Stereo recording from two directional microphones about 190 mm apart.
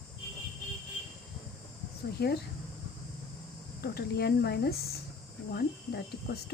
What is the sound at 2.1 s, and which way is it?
Speech, 55° left (ahead or behind).